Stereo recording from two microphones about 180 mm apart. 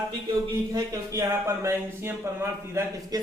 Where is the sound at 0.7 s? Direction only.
20° right (ahead or behind).